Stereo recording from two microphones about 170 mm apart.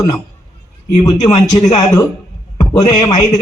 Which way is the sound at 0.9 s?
25° left (ahead or behind).